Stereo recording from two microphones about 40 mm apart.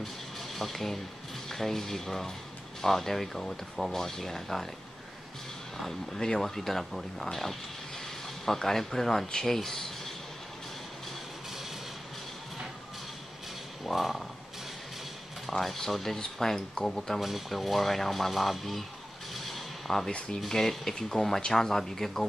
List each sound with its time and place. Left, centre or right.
0.6 s speech: centre
5.8 s speech: centre
8.5 s speech: centre
13.9 s speech: centre
15.6 s speech: centre
17.2 s speech: centre
19.3 s a sound: centre
20.1 s speech: left
20.3 s speech: centre